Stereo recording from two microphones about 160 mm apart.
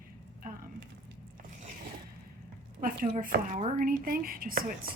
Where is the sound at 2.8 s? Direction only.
60° right (ahead or behind).